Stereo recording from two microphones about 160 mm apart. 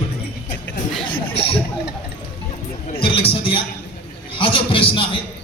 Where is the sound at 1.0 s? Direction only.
35° left (ahead or behind).